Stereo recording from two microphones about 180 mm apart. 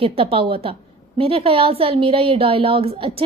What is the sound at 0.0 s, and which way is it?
A woman's voice, 30° right (ahead or behind).